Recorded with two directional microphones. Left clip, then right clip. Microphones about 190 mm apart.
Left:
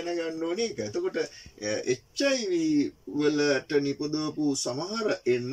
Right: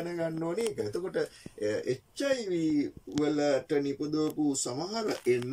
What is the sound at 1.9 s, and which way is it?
Speech, 15° left (ahead or behind).